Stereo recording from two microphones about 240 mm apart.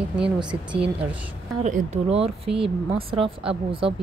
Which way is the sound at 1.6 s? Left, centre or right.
Right.